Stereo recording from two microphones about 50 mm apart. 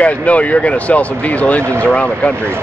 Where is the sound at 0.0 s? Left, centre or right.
Left.